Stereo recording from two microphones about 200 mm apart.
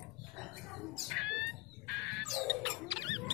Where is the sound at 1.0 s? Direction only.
Centre (ahead or behind).